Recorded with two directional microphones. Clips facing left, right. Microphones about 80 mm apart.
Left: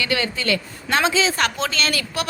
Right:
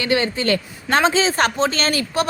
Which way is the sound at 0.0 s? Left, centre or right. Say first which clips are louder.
Right 4 dB; right.